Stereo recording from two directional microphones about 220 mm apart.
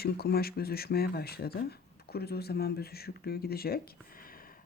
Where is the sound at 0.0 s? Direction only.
45° left (ahead or behind).